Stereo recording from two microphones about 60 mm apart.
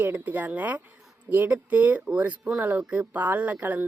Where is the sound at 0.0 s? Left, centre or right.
Right.